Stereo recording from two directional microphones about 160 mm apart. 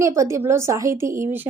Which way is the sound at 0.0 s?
20° right (ahead or behind).